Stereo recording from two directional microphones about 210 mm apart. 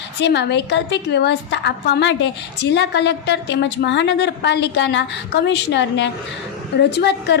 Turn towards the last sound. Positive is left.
turn(degrees=55)  # may be behind; listen again after turning